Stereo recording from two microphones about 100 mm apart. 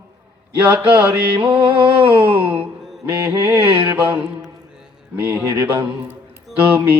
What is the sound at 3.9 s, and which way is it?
Mantra, 10° right (ahead or behind).